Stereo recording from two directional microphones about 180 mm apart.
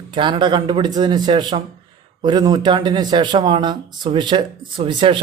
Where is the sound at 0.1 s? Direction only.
25° right (ahead or behind).